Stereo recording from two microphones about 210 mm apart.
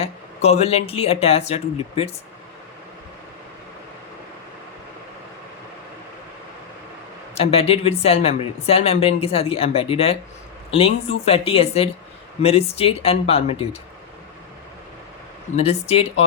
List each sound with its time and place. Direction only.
0.0 s speech: 30° left (ahead or behind)
7.3 s speech: 30° left (ahead or behind)
15.5 s speech: 30° left (ahead or behind)